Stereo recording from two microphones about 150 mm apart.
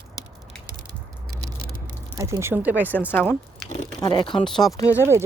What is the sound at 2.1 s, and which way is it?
Speech, 20° right (ahead or behind).